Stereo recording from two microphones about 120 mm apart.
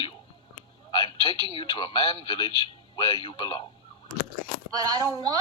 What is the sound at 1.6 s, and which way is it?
A man's voice, 45° left (ahead or behind).